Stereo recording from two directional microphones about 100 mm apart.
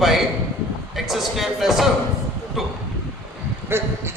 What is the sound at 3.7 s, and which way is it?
Speech, 25° right (ahead or behind).